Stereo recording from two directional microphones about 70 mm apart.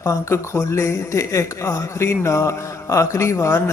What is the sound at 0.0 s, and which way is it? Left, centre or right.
Speech, left.